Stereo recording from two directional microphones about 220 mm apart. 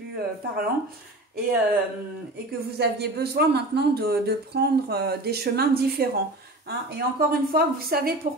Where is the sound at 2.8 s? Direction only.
50° right (ahead or behind).